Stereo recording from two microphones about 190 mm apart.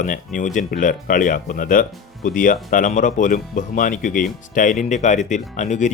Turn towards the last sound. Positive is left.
turn(degrees=40)  # may be behind; listen again after turning